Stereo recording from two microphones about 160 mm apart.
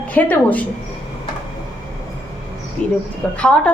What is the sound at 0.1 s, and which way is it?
Speech, 10° left (ahead or behind).